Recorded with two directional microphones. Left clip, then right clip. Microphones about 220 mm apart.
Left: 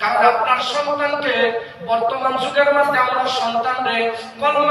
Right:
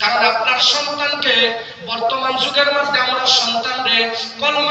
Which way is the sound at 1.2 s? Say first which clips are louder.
Right 3 dB; 20° left (ahead or behind).